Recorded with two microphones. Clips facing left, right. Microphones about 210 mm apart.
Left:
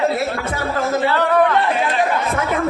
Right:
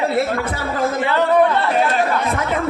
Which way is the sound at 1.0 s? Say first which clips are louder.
Right 2 dB; 20° right (ahead or behind).